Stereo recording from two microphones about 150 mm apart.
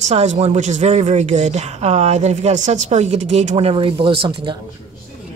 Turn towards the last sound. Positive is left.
turn(degrees=-35)  # may be behind; listen again after turning